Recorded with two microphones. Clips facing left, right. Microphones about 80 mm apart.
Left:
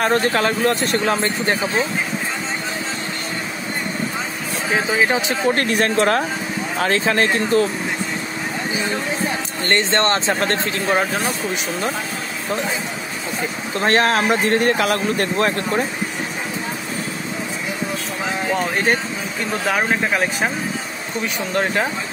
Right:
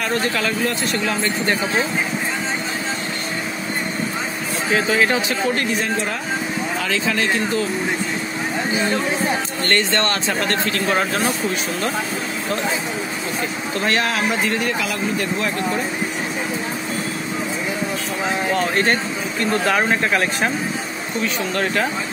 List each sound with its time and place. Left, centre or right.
0.0 s speech: left
4.7 s speech: centre
5.5 s speech: left
6.8 s speech: left
9.6 s speech: left
13.7 s speech: left
18.5 s speech: centre
21.2 s speech: centre